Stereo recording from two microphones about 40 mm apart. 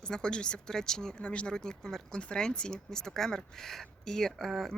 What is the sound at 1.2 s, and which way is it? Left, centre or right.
Speech, left.